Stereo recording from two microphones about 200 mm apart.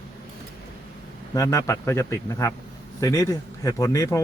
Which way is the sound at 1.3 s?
15° left (ahead or behind).